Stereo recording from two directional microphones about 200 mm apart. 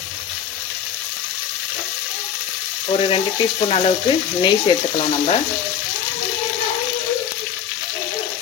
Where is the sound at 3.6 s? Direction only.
30° left (ahead or behind).